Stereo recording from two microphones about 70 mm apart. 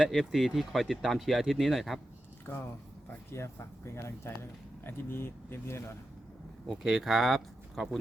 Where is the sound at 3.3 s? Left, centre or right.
Left.